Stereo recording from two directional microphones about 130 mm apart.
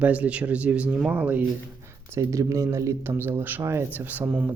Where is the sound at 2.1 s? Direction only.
25° right (ahead or behind).